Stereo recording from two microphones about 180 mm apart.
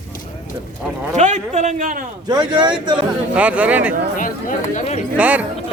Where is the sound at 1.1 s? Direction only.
40° right (ahead or behind).